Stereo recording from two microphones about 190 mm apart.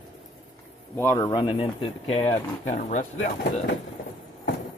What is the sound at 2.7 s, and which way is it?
Speech, 40° left (ahead or behind).